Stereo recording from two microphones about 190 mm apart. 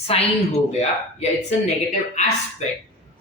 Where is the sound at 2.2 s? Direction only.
40° left (ahead or behind).